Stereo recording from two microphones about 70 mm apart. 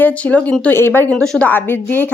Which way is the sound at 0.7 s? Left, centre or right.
Left.